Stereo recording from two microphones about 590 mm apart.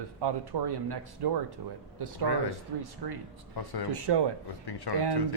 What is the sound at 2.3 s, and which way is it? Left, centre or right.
Speech, left.